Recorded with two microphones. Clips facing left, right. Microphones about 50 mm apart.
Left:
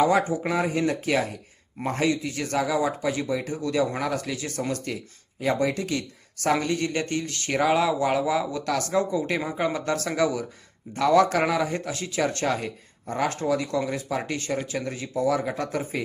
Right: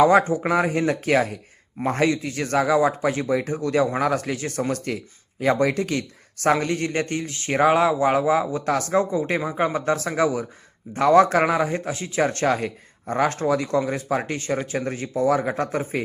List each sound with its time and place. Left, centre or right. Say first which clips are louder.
0.0 s a man's voice: right 5 dB; right
10.9 s a man's voice: right 4 dB; right